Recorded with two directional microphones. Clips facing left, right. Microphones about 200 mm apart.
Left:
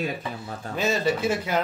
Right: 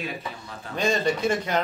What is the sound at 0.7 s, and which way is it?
Speech, 5° left (ahead or behind).